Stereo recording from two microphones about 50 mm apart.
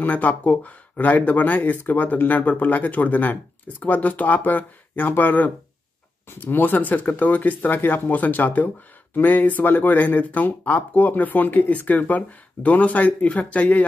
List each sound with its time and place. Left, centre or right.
0.0 s speech: left